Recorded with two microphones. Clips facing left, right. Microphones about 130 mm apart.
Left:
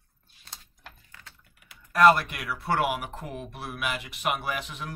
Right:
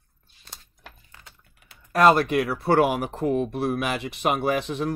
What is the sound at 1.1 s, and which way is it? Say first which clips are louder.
Speech: right 1 dB; 25° right (ahead or behind).